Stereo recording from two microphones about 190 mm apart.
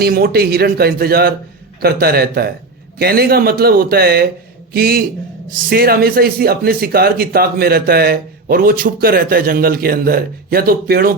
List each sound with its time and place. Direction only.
0.0 s a man's voice: 55° right (ahead or behind)